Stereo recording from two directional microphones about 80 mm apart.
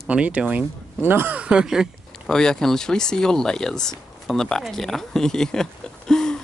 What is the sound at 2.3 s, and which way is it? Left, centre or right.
Speech, centre.